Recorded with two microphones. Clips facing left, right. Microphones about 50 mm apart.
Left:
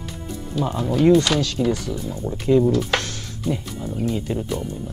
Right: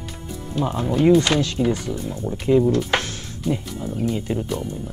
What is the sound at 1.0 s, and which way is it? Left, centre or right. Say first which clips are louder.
Speech: even; centre.